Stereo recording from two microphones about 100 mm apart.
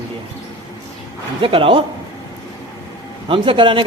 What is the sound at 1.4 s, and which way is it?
Speech, 65° right (ahead or behind).